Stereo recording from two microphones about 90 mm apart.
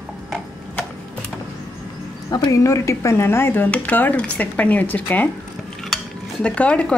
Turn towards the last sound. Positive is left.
turn(degrees=15)  # may be behind; listen again after turning